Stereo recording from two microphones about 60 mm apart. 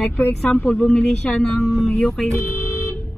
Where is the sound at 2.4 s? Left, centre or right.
Left.